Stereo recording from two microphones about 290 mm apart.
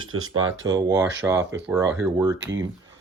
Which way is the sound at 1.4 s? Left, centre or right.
Right.